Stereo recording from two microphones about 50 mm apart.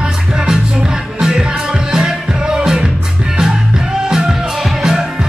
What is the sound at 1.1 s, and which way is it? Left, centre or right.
Music, centre.